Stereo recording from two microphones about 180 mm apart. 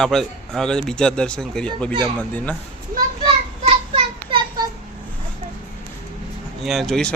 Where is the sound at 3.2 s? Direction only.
30° right (ahead or behind).